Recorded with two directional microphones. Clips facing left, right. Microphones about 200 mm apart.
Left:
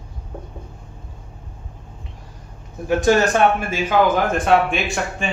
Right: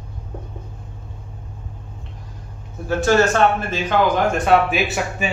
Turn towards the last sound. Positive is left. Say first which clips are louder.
# right 1 dB
turn(degrees=-5)  # may be behind; listen again after turning